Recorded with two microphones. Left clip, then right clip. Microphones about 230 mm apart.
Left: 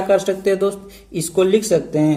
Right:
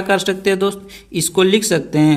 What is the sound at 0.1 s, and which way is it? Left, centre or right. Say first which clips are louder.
A man's voice: right 1 dB; right.